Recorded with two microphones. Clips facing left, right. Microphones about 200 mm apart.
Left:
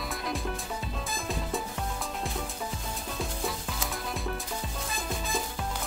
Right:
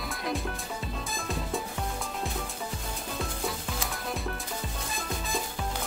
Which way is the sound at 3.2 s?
Centre (ahead or behind).